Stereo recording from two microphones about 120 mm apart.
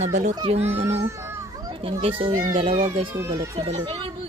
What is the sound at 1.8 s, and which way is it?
A child's voice, 50° right (ahead or behind).